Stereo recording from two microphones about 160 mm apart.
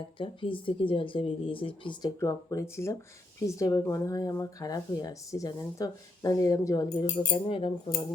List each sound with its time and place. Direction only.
0.2 s speech: 30° left (ahead or behind)
7.3 s speech: 35° left (ahead or behind)